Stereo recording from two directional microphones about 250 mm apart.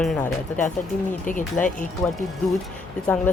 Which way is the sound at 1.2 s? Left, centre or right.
Left.